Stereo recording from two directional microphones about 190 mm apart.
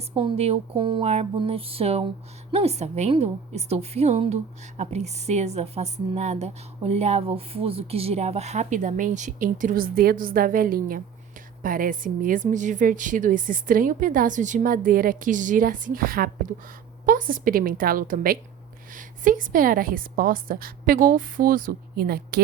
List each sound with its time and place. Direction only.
0.1 s a woman's voice: 25° right (ahead or behind); by 22.4 s 55° right (ahead or behind)